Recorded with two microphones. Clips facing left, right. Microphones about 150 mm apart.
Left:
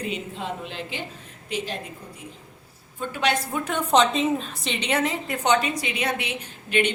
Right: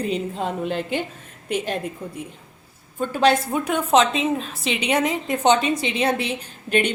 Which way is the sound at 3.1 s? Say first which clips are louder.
Right 7 dB; 35° right (ahead or behind).